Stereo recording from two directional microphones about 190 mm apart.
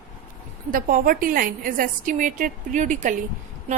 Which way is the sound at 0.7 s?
45° right (ahead or behind).